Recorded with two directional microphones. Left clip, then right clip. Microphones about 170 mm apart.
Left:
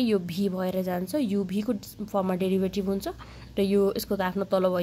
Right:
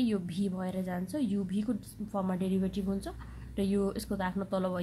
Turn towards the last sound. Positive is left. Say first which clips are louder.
# left 9 dB
turn(degrees=30)  # may be behind; listen again after turning